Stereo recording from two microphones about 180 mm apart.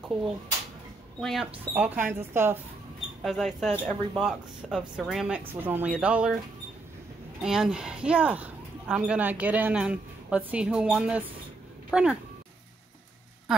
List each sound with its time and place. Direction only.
1.2 s speech: centre (ahead or behind)
3.2 s speech: centre (ahead or behind)
7.4 s speech: 5° right (ahead or behind)
13.5 s a sound: centre (ahead or behind)